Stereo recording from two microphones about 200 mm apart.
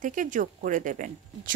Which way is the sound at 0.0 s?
40° right (ahead or behind).